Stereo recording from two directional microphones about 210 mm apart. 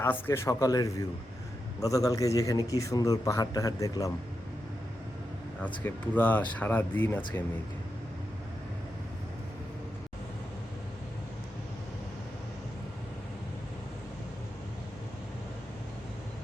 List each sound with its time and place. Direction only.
0.0 s a man's voice: 10° left (ahead or behind)
5.8 s a man's voice: 10° left (ahead or behind)